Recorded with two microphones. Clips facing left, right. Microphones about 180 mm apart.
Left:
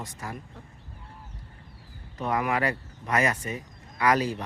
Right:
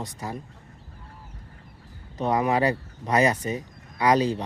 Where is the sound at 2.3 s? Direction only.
25° right (ahead or behind).